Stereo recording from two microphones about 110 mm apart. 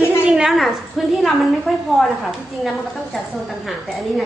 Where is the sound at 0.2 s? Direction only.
5° right (ahead or behind).